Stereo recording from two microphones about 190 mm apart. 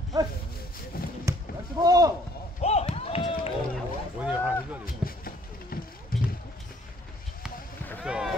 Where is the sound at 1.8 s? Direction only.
20° right (ahead or behind).